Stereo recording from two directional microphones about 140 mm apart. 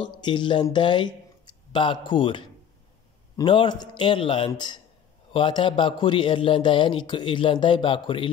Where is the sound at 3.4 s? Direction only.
35° left (ahead or behind).